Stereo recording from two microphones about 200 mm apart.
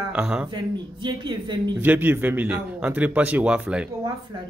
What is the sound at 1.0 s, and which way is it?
Speech, 25° right (ahead or behind).